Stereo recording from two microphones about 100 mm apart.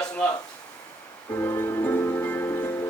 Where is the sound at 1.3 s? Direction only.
25° left (ahead or behind).